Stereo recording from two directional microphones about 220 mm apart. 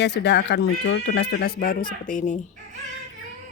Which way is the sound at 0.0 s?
50° left (ahead or behind).